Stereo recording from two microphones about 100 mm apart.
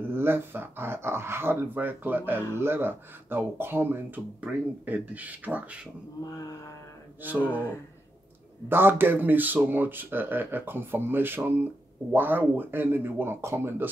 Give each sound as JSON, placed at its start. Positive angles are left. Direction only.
{"t": 0.0, "sound": "speech", "side_deg": -25}
{"t": 6.2, "sound": "mantra", "side_deg": 35}
{"t": 7.2, "sound": "speech", "side_deg": -15}
{"t": 8.6, "sound": "speech", "side_deg": -20}